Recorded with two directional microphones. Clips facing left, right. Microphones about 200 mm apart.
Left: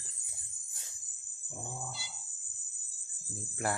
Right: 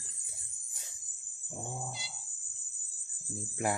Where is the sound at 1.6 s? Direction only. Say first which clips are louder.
Right 2 dB; 20° right (ahead or behind).